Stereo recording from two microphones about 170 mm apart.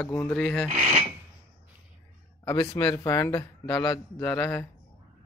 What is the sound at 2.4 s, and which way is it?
A man's voice, 25° left (ahead or behind).